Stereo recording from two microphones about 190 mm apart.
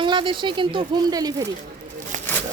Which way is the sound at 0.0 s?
25° right (ahead or behind).